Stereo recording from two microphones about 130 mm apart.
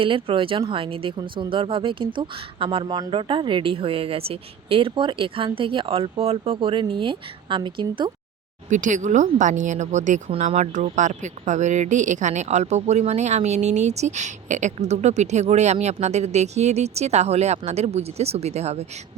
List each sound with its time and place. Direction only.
0.0 s a woman's voice: 40° right (ahead or behind)
8.7 s speech: 70° right (ahead or behind)